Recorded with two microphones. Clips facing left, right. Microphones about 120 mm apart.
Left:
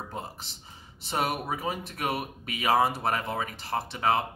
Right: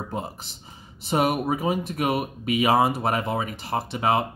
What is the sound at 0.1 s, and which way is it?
Speech, 15° right (ahead or behind).